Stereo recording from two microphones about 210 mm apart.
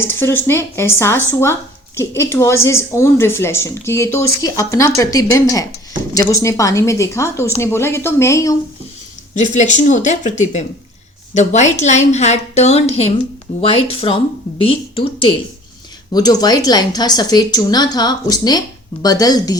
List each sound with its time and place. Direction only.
0.0 s a woman's voice: 10° left (ahead or behind)
9.3 s a woman's voice: 35° left (ahead or behind); by 19.5 s 15° left (ahead or behind)